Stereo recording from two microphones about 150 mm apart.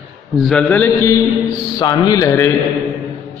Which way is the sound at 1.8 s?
25° left (ahead or behind).